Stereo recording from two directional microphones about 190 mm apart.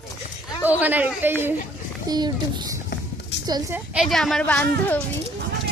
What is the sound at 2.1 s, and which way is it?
Speech, 20° right (ahead or behind).